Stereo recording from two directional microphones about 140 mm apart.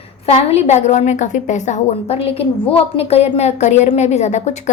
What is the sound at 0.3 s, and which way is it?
A woman's voice, 50° left (ahead or behind).